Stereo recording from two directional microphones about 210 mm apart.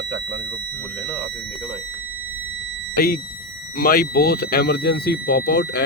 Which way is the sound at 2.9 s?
45° left (ahead or behind).